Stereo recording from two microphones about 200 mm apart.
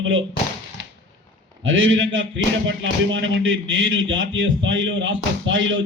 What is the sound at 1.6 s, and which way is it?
Speech, 75° right (ahead or behind).